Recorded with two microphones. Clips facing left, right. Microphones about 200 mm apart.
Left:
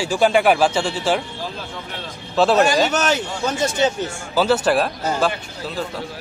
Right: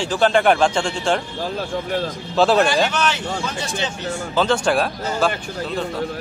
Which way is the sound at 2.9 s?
40° left (ahead or behind).